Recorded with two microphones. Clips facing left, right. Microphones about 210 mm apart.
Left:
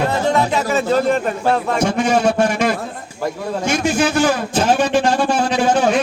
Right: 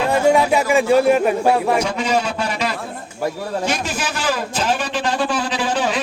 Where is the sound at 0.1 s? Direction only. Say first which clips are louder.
Right 2 dB; 10° right (ahead or behind).